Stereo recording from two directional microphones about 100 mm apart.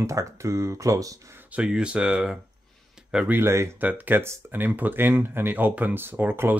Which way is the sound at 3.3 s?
25° right (ahead or behind).